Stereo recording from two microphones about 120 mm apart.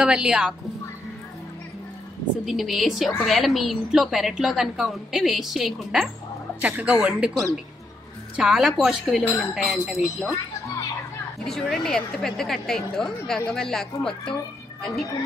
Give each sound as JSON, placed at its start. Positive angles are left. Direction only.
{"t": 0.0, "sound": "speech", "side_deg": -10}
{"t": 2.4, "sound": "a woman's voice", "side_deg": 0}
{"t": 8.4, "sound": "a woman's voice", "side_deg": -5}
{"t": 11.4, "sound": "a woman's voice", "side_deg": 5}